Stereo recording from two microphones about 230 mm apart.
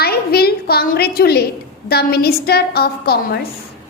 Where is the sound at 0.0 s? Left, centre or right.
Left.